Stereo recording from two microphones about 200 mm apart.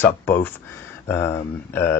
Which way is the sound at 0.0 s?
10° left (ahead or behind).